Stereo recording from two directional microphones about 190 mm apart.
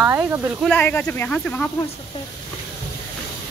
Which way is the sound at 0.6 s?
10° left (ahead or behind).